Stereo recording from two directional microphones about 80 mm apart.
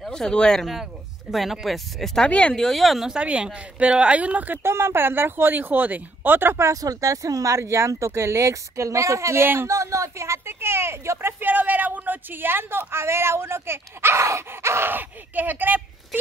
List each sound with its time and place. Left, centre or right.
0.0 s speech: centre
1.3 s speech: centre
2.2 s speech: centre
2.6 s speech: centre
4.6 s speech: right
6.7 s speech: right